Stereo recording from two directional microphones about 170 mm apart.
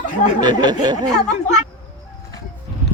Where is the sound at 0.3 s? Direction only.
25° right (ahead or behind).